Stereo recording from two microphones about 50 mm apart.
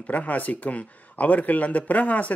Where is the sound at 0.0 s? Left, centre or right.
Left.